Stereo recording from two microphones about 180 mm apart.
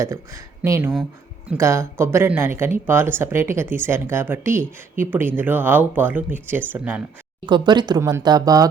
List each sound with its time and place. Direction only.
0.0 s speech: 15° right (ahead or behind)
7.4 s speech: 25° right (ahead or behind)